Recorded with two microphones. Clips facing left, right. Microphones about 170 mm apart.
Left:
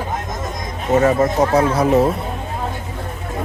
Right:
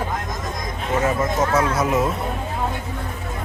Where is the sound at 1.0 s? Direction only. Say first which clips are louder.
Left 4 dB; 40° left (ahead or behind).